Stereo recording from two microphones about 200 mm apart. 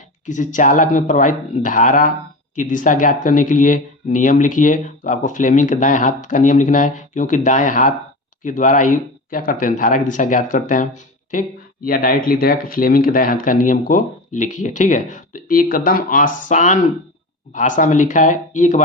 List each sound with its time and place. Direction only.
0.3 s speech: 40° left (ahead or behind)